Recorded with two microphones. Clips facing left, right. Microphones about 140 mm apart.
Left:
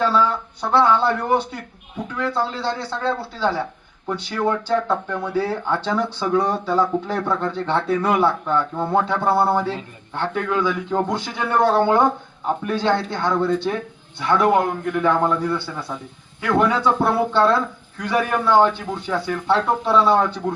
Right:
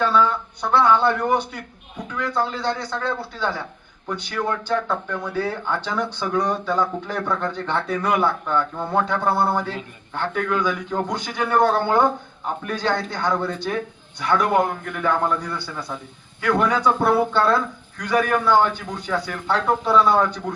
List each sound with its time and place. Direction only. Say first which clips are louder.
0.0 s speech: even; 30° left (ahead or behind)
8.5 s speech: left 3 dB; 5° left (ahead or behind)
9.0 s speech: left 2 dB; 30° left (ahead or behind)